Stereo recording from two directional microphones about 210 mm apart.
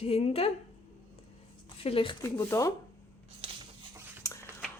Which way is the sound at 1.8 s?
25° left (ahead or behind).